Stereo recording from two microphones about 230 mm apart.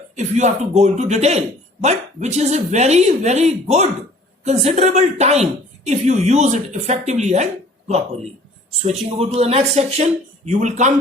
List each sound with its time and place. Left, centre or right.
0.2 s a woman's voice: right